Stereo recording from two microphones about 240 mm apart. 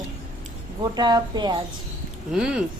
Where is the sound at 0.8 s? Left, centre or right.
Centre.